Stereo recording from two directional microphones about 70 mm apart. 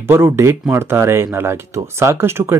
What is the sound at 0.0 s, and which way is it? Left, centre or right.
Speech, right.